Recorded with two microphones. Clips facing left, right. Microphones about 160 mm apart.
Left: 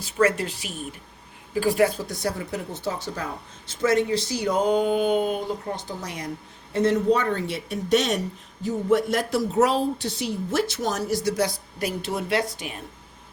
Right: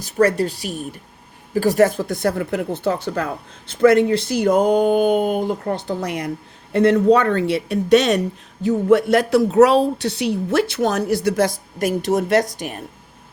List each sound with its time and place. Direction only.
0.2 s speech: 35° right (ahead or behind)